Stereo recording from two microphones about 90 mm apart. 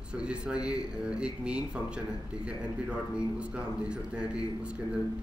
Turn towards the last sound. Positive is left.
turn(degrees=-10)  # may be behind; listen again after turning